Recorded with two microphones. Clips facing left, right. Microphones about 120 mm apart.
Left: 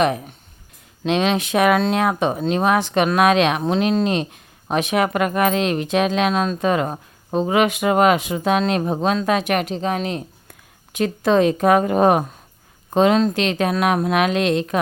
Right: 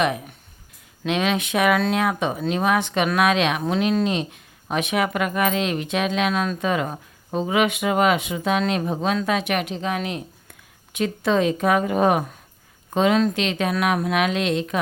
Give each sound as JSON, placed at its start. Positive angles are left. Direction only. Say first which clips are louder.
{"t": 0.0, "sound": "speech", "louder": "left 3 dB", "side_deg": 35}
{"t": 6.7, "sound": "a woman's voice", "louder": "left 4 dB", "side_deg": 40}